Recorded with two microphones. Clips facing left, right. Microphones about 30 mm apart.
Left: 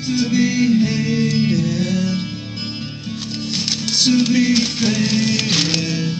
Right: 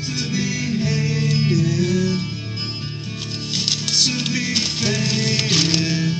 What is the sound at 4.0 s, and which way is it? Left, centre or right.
Music, centre.